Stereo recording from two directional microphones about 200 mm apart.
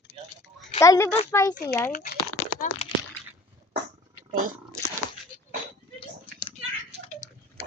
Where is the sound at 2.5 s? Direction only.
40° left (ahead or behind).